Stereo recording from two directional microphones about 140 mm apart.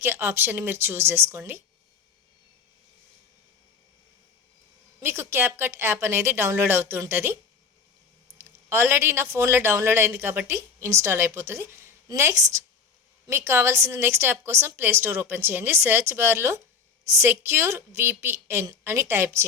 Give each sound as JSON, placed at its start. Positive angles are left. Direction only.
{"t": 0.0, "sound": "speech", "side_deg": -15}
{"t": 4.9, "sound": "speech", "side_deg": -20}
{"t": 8.4, "sound": "a woman's voice", "side_deg": -15}